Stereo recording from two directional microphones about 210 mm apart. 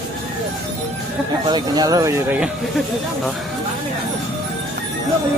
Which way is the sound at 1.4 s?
20° right (ahead or behind).